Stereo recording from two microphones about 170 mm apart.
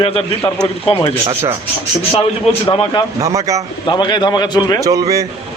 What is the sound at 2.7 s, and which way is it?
Speech, 30° left (ahead or behind).